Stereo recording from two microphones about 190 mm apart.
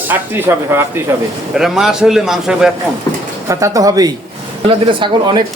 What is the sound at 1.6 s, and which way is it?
A man's voice, centre (ahead or behind).